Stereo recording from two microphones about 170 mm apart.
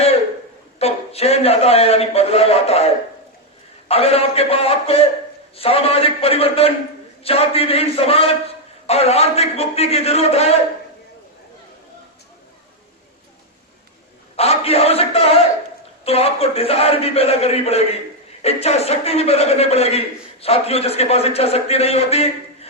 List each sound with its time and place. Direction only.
0.8 s a man's voice: 35° left (ahead or behind)
14.3 s a man's voice: 35° left (ahead or behind)